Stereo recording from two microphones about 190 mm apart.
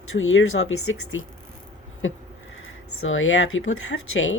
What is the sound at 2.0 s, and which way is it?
Speech, 90° left.